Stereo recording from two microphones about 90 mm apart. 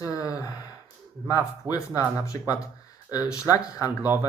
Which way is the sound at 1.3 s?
40° left (ahead or behind).